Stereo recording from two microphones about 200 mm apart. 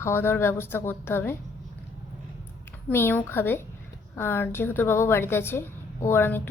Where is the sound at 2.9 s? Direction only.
10° left (ahead or behind).